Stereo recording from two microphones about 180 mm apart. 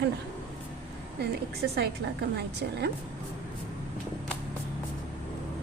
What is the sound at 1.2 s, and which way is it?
A woman's voice, 65° right (ahead or behind).